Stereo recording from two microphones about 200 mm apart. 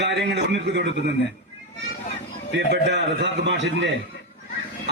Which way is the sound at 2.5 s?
60° right (ahead or behind).